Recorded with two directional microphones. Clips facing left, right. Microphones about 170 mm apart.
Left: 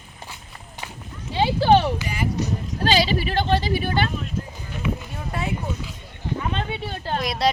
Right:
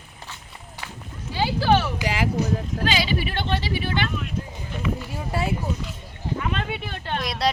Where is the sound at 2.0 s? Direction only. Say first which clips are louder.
Right 3 dB; 90° right.